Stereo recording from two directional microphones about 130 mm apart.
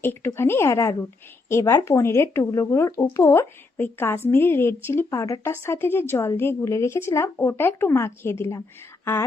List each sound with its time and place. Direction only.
0.0 s a woman's voice: 15° left (ahead or behind)